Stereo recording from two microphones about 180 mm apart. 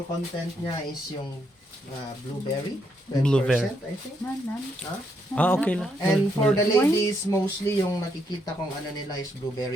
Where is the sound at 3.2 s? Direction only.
Centre (ahead or behind).